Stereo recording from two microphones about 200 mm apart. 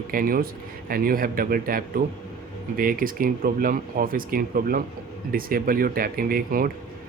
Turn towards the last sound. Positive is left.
turn(degrees=-45)  # may be behind; listen again after turning